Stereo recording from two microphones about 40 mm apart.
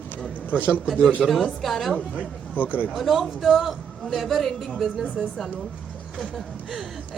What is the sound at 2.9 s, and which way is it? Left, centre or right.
A man's voice, centre.